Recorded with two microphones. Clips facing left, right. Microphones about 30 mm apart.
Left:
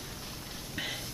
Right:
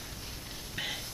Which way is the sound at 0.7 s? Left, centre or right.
Centre.